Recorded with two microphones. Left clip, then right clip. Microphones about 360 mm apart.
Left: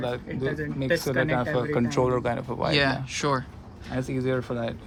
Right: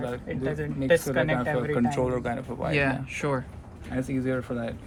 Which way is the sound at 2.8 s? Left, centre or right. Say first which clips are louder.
Left 2 dB; centre.